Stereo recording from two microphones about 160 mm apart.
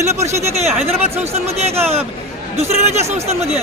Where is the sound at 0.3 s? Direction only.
45° right (ahead or behind).